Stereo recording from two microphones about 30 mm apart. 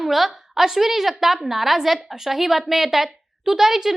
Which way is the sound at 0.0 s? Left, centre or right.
Centre.